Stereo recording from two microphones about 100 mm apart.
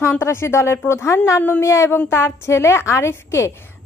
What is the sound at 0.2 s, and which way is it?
A woman's voice, 25° left (ahead or behind).